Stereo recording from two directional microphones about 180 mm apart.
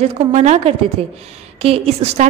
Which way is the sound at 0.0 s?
40° right (ahead or behind).